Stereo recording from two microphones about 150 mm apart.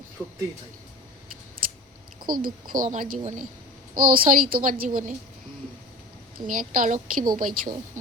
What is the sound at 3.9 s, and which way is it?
A woman's voice, 65° right (ahead or behind).